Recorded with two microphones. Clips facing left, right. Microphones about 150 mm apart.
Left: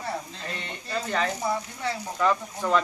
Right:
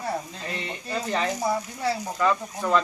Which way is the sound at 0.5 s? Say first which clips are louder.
Right 5 dB; 35° right (ahead or behind).